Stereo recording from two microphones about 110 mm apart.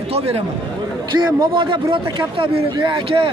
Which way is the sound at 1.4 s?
45° right (ahead or behind).